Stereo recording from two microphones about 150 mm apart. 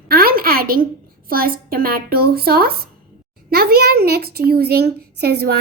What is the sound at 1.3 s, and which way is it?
A woman's voice, 75° right (ahead or behind).